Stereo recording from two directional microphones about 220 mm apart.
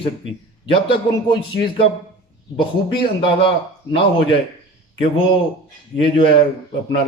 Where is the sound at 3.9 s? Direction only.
25° left (ahead or behind).